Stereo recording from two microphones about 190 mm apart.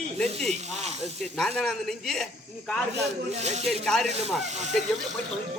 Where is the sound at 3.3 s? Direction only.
35° right (ahead or behind).